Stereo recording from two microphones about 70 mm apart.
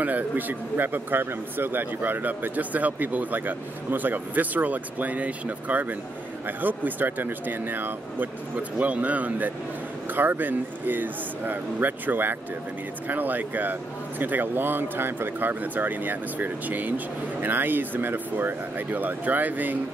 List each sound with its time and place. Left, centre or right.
0.0 s speech: right